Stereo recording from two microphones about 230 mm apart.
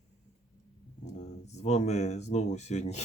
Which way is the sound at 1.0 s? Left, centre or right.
Left.